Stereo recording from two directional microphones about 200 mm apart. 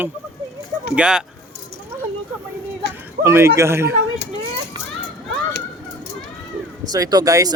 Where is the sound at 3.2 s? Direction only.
10° right (ahead or behind).